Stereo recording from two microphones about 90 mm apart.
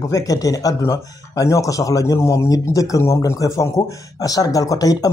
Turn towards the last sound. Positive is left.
turn(degrees=45)  # may be behind; listen again after turning